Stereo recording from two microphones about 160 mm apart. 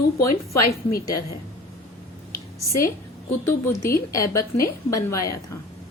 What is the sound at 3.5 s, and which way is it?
A woman's voice, 15° left (ahead or behind).